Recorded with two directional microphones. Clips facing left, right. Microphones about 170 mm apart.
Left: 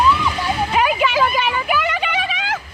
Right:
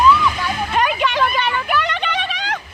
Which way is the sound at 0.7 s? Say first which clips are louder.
Left 1 dB; 5° left (ahead or behind).